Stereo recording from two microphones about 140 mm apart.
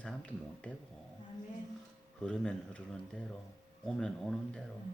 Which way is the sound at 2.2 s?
5° left (ahead or behind).